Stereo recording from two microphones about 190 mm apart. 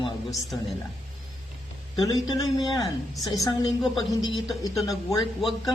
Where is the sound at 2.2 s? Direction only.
20° left (ahead or behind).